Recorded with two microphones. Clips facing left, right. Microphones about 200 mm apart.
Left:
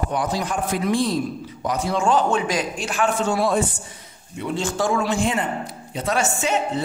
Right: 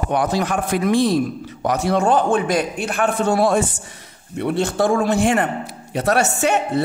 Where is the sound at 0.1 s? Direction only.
65° right (ahead or behind).